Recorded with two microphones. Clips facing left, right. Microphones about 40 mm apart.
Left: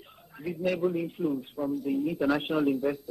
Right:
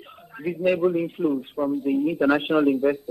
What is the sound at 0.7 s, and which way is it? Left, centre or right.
A man's voice, right.